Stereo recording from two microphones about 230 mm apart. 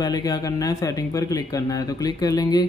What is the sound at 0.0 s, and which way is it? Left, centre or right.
A man's voice, centre.